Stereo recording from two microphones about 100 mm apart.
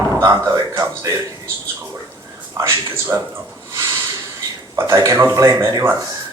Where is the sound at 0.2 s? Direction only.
35° right (ahead or behind).